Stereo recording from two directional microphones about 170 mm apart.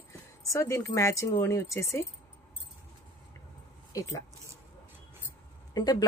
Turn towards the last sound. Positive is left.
turn(degrees=20)  # may be behind; listen again after turning